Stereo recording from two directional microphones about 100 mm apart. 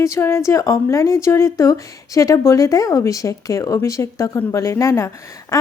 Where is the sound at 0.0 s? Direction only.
30° left (ahead or behind).